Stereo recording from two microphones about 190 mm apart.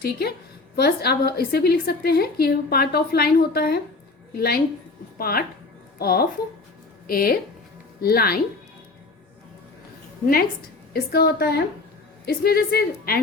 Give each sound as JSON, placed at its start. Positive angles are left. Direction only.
{"t": 0.0, "sound": "a woman's voice", "side_deg": 55}
{"t": 10.9, "sound": "a woman's voice", "side_deg": 55}